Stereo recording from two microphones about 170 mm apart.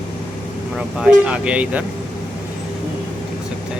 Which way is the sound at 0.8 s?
5° right (ahead or behind).